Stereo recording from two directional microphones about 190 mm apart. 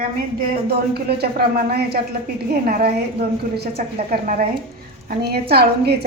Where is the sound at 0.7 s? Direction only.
55° right (ahead or behind).